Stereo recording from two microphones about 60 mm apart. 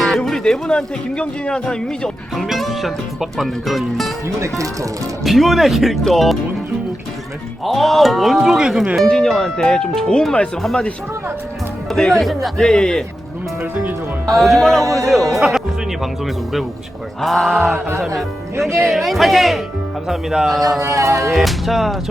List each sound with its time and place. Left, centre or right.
0.2 s speech: centre
2.3 s speech: centre
4.4 s speech: right
5.2 s speech: centre
7.6 s speech: centre
9.0 s speech: centre
11.9 s speech: centre
14.3 s speech: centre
18.9 s speech: centre
20.7 s speech: right
21.2 s speech: centre